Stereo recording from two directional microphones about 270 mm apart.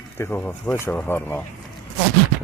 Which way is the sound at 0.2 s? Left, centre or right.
Centre.